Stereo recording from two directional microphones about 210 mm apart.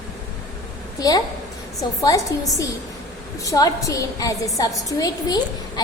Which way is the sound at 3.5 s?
15° left (ahead or behind).